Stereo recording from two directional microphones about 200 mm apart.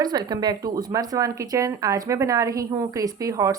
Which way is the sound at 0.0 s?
20° right (ahead or behind).